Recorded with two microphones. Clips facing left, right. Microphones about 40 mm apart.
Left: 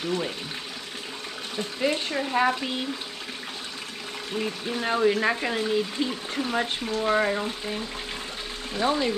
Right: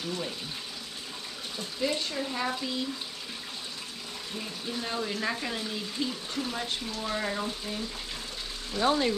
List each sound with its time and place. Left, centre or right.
1.6 s speech: left
4.4 s speech: left